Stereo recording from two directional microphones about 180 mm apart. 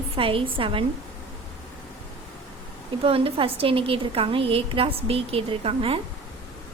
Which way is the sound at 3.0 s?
30° right (ahead or behind).